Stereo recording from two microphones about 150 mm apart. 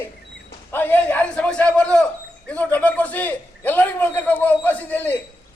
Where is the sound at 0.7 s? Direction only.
15° left (ahead or behind).